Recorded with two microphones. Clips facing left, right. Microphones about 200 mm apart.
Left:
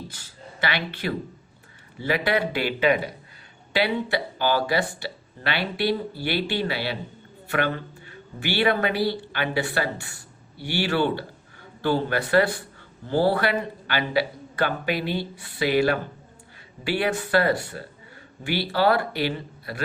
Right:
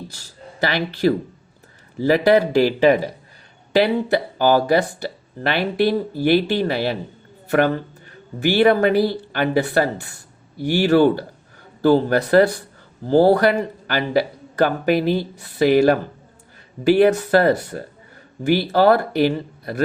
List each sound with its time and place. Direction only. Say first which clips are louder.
0.1 s a man's voice: right 3 dB; 40° right (ahead or behind)
4.4 s speech: right 7 dB; 45° right (ahead or behind)
8.4 s speech: right 8 dB; 45° right (ahead or behind)